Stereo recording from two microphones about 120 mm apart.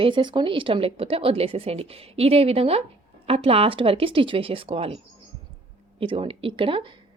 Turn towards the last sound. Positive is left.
turn(degrees=-45)  # may be behind; listen again after turning